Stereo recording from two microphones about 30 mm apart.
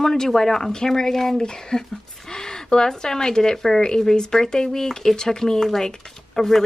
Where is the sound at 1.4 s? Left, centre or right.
Left.